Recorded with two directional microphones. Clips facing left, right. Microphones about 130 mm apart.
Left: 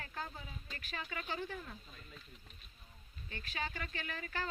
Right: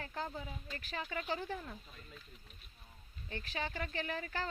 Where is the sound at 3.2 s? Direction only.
35° right (ahead or behind).